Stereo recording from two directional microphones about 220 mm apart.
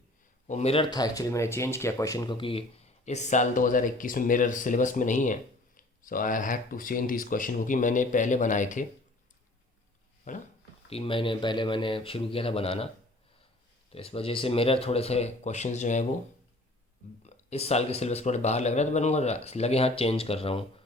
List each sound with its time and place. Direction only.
0.4 s speech: 30° left (ahead or behind)
10.3 s speech: 35° left (ahead or behind)
10.8 s speech: 25° left (ahead or behind)
13.9 s speech: 25° left (ahead or behind)
17.2 s speech: 30° left (ahead or behind)